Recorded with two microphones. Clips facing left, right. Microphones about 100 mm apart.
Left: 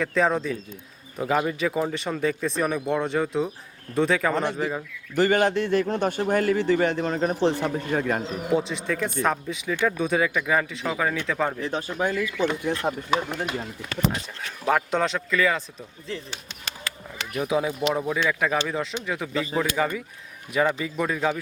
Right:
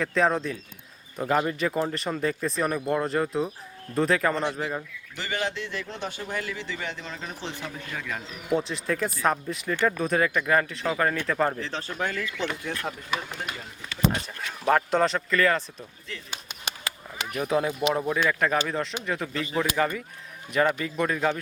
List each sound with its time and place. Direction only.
0.0 s speech: centre (ahead or behind)
5.1 s a man's voice: 50° left (ahead or behind)
8.5 s speech: centre (ahead or behind)
11.6 s speech: 15° left (ahead or behind)
14.6 s speech: centre (ahead or behind)
16.3 s a sound: 15° right (ahead or behind)
17.3 s speech: 5° left (ahead or behind)